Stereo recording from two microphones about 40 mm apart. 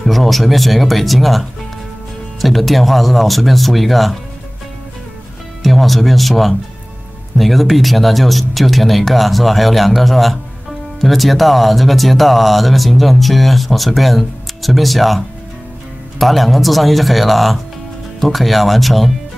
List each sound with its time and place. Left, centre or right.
0.0 s speech: centre
5.6 s speech: centre